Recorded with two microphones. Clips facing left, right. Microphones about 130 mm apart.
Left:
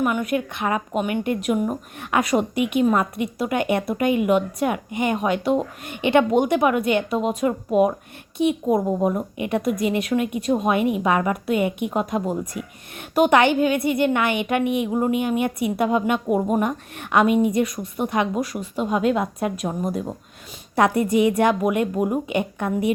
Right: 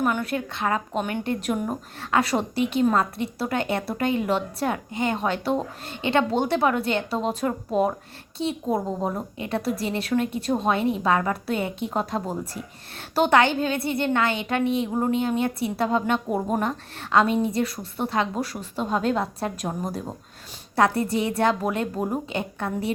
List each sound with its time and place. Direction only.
0.0 s a woman's voice: 10° left (ahead or behind)
20.7 s a woman's voice: 20° left (ahead or behind)